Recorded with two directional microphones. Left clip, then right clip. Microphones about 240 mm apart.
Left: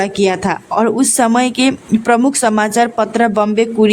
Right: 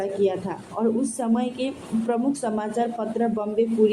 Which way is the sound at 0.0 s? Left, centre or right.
Left.